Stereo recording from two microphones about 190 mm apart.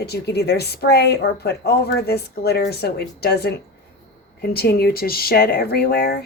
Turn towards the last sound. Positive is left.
turn(degrees=55)  # may be behind; listen again after turning